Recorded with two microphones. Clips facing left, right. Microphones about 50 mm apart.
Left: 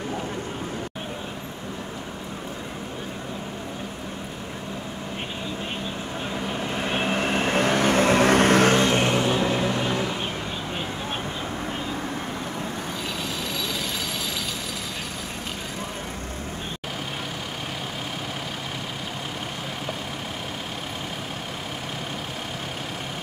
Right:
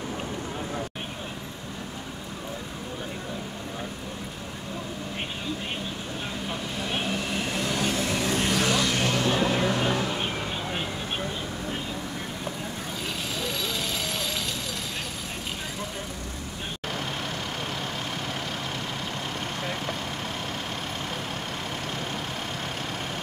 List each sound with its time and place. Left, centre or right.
6.8 s vehicle: left; by 9.9 s centre